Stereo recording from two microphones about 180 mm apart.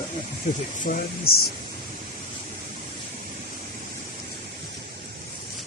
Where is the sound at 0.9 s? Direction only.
50° left (ahead or behind).